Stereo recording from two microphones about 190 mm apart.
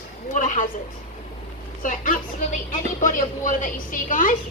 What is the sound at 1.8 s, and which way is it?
A woman's voice, 45° left (ahead or behind).